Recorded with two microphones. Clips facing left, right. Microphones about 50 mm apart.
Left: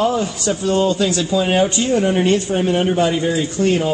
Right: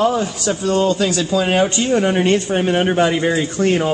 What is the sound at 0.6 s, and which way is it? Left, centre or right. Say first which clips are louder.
Speech: even; right.